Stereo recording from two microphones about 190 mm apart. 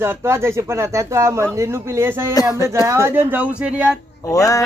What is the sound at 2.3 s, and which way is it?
Speech, 20° left (ahead or behind).